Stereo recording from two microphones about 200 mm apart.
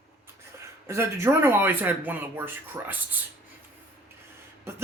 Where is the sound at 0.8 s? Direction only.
15° right (ahead or behind).